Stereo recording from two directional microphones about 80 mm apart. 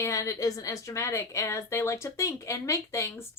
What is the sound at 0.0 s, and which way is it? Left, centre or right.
A woman's voice, left.